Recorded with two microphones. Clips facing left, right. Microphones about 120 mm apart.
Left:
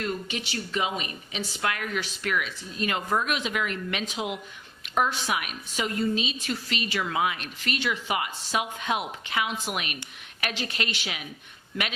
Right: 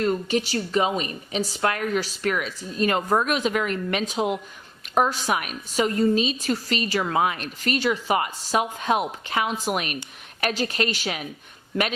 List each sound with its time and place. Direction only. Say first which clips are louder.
0.0 s a woman's voice: right 8 dB; 40° right (ahead or behind)